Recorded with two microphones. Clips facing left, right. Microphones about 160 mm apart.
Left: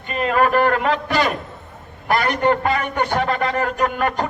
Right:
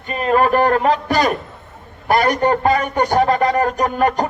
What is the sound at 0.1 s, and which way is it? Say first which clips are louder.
A man's voice: right 2 dB; 35° right (ahead or behind).